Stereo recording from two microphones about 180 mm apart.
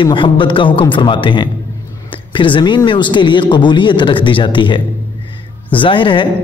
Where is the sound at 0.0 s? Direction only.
25° left (ahead or behind).